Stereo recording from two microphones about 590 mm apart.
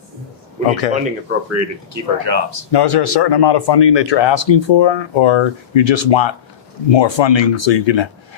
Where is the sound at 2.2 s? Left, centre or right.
Right.